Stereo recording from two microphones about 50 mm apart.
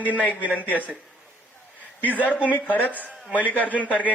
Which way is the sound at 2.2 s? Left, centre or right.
Left.